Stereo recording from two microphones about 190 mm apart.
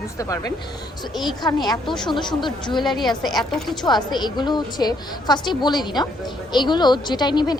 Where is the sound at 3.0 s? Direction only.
Centre (ahead or behind).